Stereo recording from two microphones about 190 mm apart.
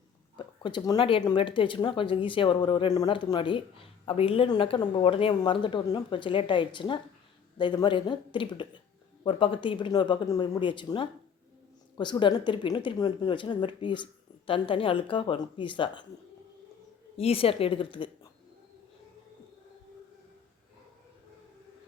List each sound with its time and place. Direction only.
0.3 s speech: 25° left (ahead or behind)
17.2 s speech: 30° left (ahead or behind)